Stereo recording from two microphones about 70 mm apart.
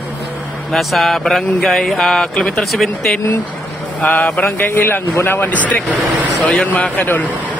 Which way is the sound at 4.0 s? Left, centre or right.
Centre.